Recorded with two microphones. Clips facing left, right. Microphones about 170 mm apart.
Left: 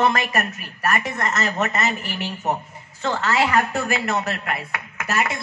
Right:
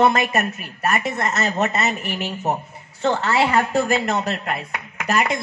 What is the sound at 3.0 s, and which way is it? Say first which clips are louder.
A woman's voice: right 2 dB; 30° right (ahead or behind).